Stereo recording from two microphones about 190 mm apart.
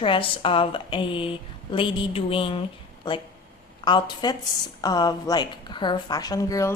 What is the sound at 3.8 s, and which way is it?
A woman's voice, 25° left (ahead or behind).